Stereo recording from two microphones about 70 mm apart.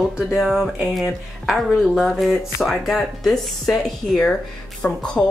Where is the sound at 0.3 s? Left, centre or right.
Centre.